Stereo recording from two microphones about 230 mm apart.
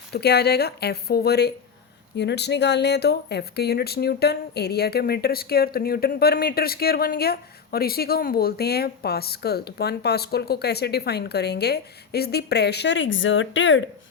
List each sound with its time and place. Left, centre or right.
0.1 s speech: left